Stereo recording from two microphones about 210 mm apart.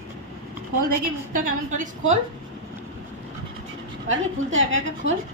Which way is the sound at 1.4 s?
35° right (ahead or behind).